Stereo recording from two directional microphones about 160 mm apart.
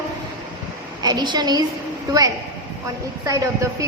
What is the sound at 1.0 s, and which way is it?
Speech, 25° right (ahead or behind).